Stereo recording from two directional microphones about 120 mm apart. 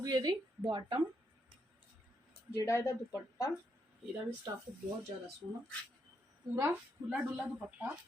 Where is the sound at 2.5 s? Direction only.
25° left (ahead or behind).